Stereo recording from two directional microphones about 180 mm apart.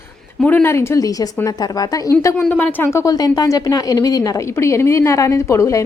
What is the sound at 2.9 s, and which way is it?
A woman's voice, 20° left (ahead or behind).